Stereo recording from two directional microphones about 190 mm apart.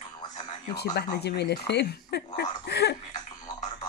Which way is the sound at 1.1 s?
60° left (ahead or behind).